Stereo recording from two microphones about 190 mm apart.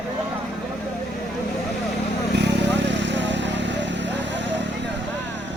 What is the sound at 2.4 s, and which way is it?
Vehicle, 65° right (ahead or behind).